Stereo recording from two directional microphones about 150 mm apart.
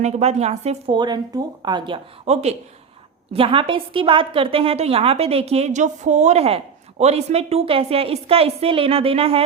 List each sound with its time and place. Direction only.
0.0 s a woman's voice: 45° right (ahead or behind)
0.9 s a woman's voice: 30° right (ahead or behind)